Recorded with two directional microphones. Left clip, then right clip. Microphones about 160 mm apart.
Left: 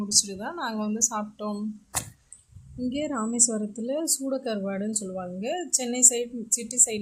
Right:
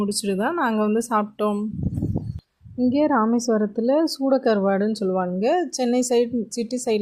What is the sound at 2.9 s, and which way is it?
Speech, 35° right (ahead or behind).